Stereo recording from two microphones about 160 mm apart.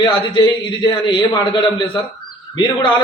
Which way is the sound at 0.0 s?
25° left (ahead or behind).